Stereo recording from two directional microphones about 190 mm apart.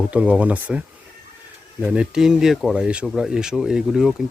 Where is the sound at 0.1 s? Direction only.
5° right (ahead or behind).